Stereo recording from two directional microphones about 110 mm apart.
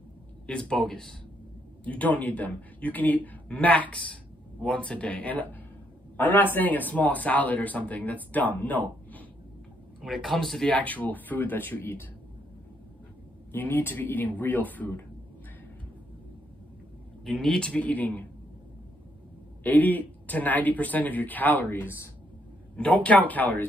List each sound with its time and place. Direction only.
0.5 s speech: 10° left (ahead or behind)
10.0 s speech: centre (ahead or behind); by 12.1 s 20° left (ahead or behind)
13.5 s speech: 15° left (ahead or behind)
17.2 s speech: 5° left (ahead or behind)
19.6 s speech: 15° left (ahead or behind)
23.0 s speech: 15° left (ahead or behind)